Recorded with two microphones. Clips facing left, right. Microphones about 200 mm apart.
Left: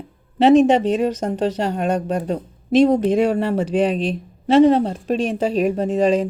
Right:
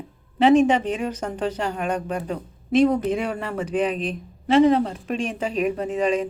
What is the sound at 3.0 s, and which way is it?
A woman's voice, 30° left (ahead or behind).